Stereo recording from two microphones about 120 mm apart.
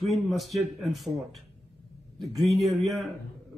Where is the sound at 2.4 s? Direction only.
Centre (ahead or behind).